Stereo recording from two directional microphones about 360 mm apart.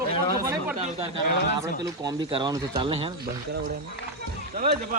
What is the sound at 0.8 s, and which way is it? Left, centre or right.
Speech, centre.